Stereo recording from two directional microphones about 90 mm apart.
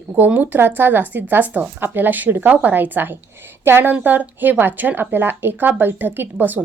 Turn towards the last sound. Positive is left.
turn(degrees=-20)  # may be behind; listen again after turning